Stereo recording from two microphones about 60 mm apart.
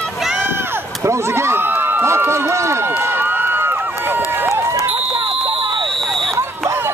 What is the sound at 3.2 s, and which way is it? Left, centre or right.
Run, right.